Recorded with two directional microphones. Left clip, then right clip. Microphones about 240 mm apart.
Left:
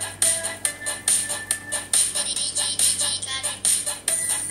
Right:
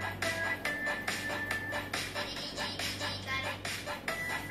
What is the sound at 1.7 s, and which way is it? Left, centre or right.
Music, left.